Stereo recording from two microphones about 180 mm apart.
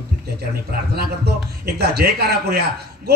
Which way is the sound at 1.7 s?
60° right (ahead or behind).